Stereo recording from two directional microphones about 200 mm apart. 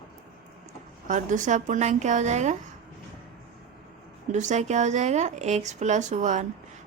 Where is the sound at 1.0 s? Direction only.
40° right (ahead or behind).